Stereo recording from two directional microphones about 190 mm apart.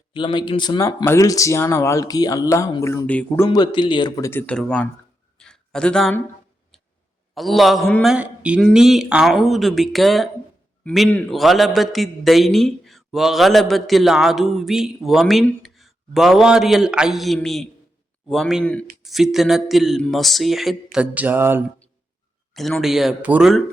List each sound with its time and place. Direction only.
0.1 s speech: 25° left (ahead or behind); by 3.4 s 10° left (ahead or behind)
3.4 s speech: 25° left (ahead or behind)
4.3 s speech: 10° left (ahead or behind)
5.4 s a sound: 5° left (ahead or behind)
7.3 s a man's voice: centre (ahead or behind)
22.5 s a man's voice: centre (ahead or behind)